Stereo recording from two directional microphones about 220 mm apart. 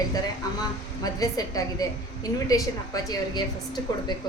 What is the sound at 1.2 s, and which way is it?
A woman's voice, 15° left (ahead or behind).